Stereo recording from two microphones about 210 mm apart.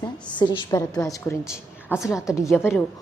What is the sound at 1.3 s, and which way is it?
A woman's voice, 10° left (ahead or behind).